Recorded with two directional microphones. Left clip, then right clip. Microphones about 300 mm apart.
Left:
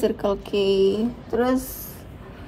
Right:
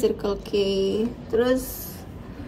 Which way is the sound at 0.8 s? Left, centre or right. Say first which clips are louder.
Left 3 dB; centre.